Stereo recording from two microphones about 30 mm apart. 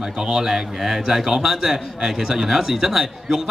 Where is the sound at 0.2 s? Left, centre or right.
Centre.